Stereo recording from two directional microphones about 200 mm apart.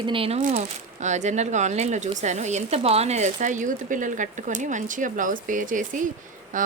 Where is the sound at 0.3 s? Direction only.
40° right (ahead or behind).